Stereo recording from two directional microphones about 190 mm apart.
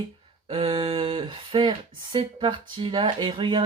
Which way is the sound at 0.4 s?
30° right (ahead or behind).